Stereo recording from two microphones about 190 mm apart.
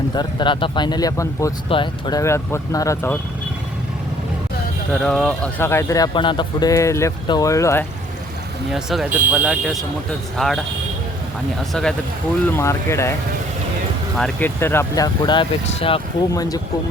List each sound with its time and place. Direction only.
0.1 s speech: 25° left (ahead or behind)
4.9 s speech: 5° left (ahead or behind)
8.7 s speech: centre (ahead or behind)
11.7 s speech: 5° left (ahead or behind)
12.5 s speech: 15° left (ahead or behind)
14.2 s speech: 10° left (ahead or behind)